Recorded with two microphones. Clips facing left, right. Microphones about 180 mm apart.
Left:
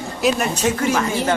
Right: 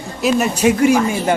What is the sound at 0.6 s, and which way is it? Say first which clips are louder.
Speech: right 7 dB; 15° right (ahead or behind).